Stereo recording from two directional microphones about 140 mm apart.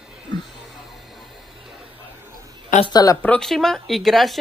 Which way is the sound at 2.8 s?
30° left (ahead or behind).